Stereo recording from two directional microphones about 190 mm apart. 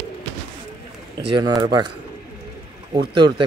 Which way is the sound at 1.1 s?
25° right (ahead or behind).